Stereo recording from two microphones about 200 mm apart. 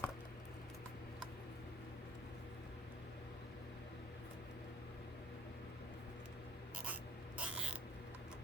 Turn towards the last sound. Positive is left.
turn(degrees=-5)  # may be behind; listen again after turning